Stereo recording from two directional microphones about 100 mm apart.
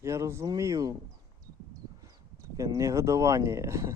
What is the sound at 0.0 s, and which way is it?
Speech, 30° right (ahead or behind).